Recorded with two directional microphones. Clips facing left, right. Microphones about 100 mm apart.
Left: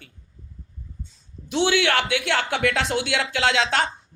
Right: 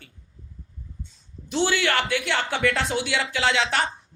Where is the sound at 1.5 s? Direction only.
60° left (ahead or behind).